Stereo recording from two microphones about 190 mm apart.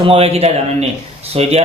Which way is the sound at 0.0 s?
30° right (ahead or behind).